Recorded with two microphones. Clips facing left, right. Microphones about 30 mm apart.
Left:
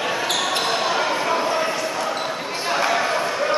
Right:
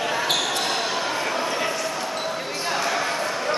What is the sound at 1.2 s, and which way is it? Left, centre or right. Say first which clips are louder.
Bow-wow: left 4 dB; centre.